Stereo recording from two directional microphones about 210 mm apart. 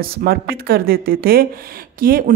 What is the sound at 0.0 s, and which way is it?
A woman's voice, 45° right (ahead or behind).